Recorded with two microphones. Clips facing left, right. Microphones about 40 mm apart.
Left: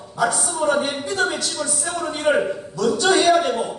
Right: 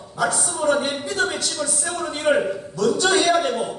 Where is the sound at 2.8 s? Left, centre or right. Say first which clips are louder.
Left 1 dB; left.